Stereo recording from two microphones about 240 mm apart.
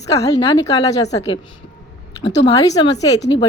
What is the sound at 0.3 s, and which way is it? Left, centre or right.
Speech, centre.